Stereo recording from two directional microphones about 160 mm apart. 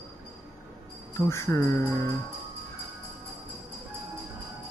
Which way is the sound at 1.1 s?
15° left (ahead or behind).